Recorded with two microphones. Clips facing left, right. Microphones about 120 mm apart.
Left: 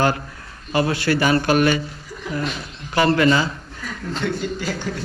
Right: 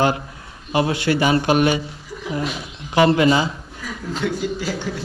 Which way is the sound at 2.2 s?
5° right (ahead or behind).